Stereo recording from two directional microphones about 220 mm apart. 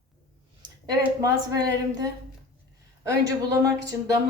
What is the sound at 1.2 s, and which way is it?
Speech, 15° right (ahead or behind).